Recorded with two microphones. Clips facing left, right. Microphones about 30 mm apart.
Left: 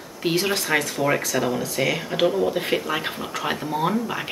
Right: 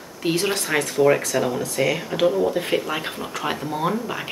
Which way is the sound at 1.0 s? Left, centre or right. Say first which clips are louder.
Right 4 dB; centre.